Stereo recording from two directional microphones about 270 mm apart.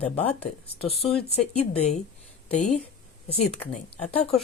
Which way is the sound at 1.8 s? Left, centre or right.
Left.